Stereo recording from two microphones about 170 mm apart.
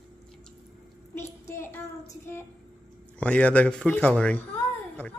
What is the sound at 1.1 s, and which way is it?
Child singing, 15° left (ahead or behind).